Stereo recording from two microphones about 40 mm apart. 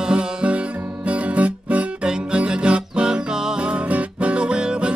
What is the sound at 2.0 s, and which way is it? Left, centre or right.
Music, right.